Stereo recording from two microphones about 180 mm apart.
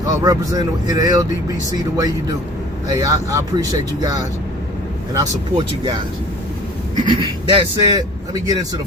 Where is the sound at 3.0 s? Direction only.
20° right (ahead or behind).